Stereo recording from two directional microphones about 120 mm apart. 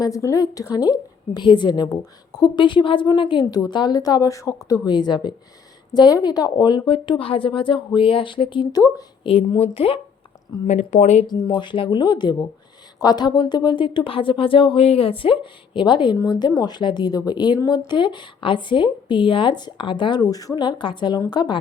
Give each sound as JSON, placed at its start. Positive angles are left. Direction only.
{"t": 0.0, "sound": "a woman's voice", "side_deg": 25}
{"t": 4.9, "sound": "a woman's voice", "side_deg": 35}
{"t": 9.2, "sound": "speech", "side_deg": 55}
{"t": 10.7, "sound": "speech", "side_deg": 75}
{"t": 11.3, "sound": "a woman's voice", "side_deg": 35}